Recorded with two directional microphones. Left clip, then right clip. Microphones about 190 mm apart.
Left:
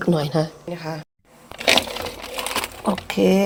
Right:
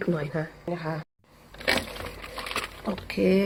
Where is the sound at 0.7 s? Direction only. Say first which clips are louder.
Left 2 dB; 5° left (ahead or behind).